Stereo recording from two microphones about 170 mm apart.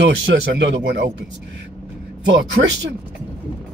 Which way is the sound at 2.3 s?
90° right.